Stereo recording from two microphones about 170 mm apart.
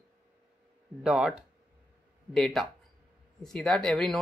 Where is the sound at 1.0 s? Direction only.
5° right (ahead or behind).